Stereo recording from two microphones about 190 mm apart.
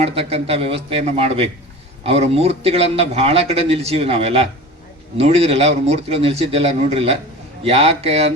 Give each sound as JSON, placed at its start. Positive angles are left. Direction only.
{"t": 0.0, "sound": "a man's voice", "side_deg": -30}